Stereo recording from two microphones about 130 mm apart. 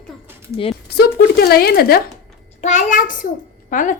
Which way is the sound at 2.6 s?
75° left (ahead or behind).